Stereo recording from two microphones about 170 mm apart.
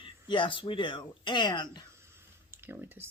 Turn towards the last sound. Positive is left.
turn(degrees=-10)  # may be behind; listen again after turning